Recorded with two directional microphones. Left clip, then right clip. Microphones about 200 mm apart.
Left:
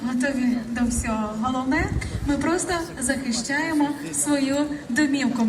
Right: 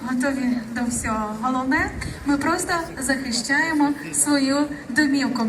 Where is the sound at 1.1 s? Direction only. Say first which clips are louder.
Right 2 dB; 15° left (ahead or behind).